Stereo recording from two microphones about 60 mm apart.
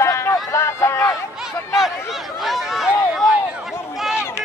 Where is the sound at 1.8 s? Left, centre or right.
Centre.